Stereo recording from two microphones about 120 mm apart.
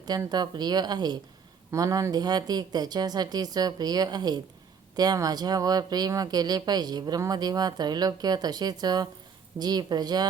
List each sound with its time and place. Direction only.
0.3 s speech: 35° right (ahead or behind)